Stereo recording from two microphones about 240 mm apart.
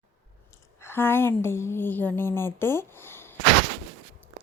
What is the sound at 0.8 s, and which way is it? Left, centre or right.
A woman's voice, centre.